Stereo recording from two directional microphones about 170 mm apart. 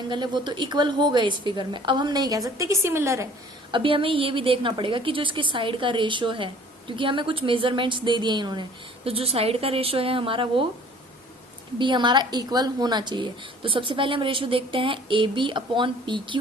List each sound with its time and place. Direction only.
0.1 s a woman's voice: 25° right (ahead or behind)
3.7 s a woman's voice: 30° right (ahead or behind)
11.8 s a woman's voice: 25° right (ahead or behind)